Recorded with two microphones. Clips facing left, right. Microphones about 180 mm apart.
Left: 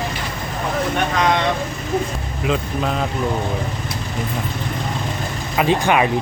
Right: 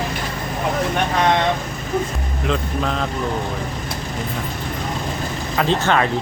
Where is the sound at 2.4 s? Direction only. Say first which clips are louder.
Left 1 dB; 5° left (ahead or behind).